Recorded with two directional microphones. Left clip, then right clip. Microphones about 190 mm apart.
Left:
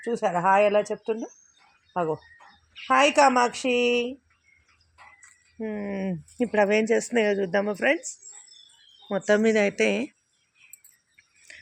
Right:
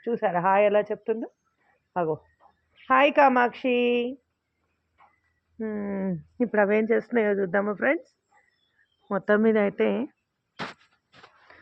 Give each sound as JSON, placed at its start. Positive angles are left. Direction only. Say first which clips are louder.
{"t": 0.0, "sound": "speech", "louder": "even", "side_deg": 15}
{"t": 5.5, "sound": "speech", "louder": "even", "side_deg": 15}